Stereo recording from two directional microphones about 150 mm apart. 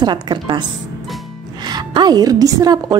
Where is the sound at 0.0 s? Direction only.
30° right (ahead or behind).